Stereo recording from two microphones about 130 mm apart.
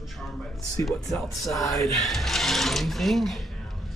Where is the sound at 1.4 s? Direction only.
Centre (ahead or behind).